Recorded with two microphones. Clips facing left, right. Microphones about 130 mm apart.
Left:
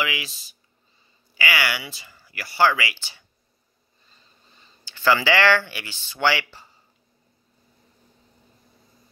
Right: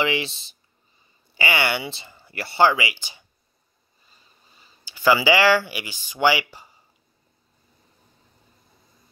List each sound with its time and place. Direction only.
0.0 s speech: 30° right (ahead or behind)
4.6 s speech: 15° right (ahead or behind)